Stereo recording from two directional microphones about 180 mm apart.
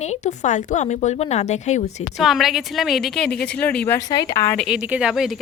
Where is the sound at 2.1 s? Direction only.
Centre (ahead or behind); by 4.5 s 20° left (ahead or behind).